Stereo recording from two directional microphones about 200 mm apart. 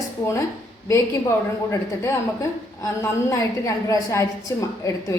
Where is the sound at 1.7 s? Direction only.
15° left (ahead or behind).